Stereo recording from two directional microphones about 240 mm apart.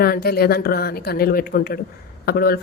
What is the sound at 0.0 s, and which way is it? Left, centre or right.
A woman's voice, left.